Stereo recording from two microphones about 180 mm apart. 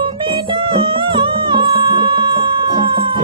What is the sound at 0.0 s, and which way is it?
Music, 30° right (ahead or behind).